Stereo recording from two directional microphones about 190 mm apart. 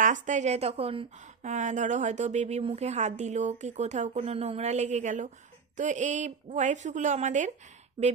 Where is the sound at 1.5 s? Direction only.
40° right (ahead or behind).